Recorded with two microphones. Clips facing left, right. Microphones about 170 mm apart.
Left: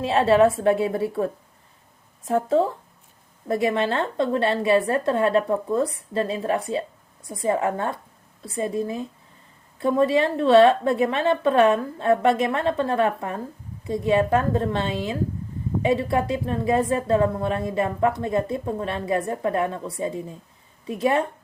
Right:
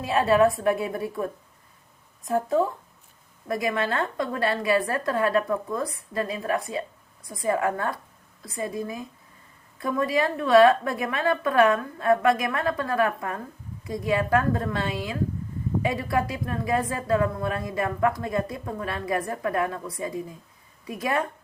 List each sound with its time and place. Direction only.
0.0 s a woman's voice: 30° left (ahead or behind)